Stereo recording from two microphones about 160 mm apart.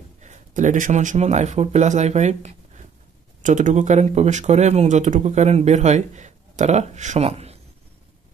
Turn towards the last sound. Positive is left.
turn(degrees=-40)  # may be behind; listen again after turning